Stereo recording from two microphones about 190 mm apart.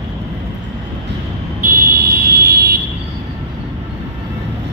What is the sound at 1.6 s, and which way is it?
Vehicle, 50° right (ahead or behind).